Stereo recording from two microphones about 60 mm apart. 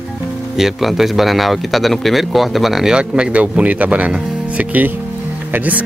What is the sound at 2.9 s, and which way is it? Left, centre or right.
Speech, centre.